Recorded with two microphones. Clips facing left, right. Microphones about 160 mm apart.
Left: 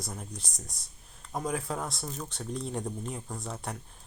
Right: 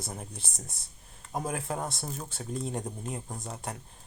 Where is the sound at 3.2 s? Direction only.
20° right (ahead or behind).